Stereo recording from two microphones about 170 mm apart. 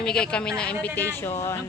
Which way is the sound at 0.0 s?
5° left (ahead or behind).